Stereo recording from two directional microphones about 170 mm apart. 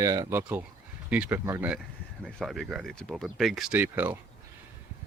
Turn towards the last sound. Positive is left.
turn(degrees=-15)  # may be behind; listen again after turning